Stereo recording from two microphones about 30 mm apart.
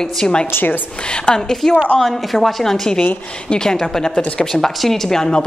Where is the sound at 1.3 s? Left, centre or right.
Left.